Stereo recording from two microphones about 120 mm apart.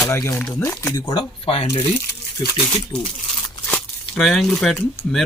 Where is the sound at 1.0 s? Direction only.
50° left (ahead or behind).